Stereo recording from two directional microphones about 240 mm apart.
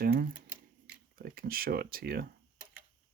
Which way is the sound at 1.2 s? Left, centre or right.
Right.